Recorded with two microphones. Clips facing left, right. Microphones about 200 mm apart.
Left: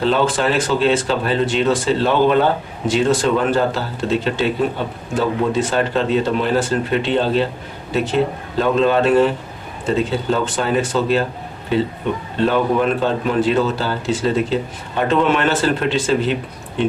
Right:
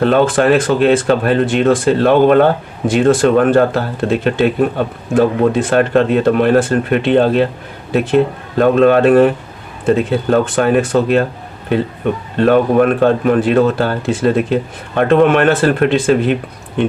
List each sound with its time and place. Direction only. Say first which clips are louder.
0.0 s speech: right 5 dB; 55° right (ahead or behind)
12.4 s speech: right 6 dB; 55° right (ahead or behind)